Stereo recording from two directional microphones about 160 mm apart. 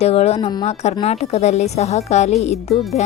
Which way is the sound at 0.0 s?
40° left (ahead or behind).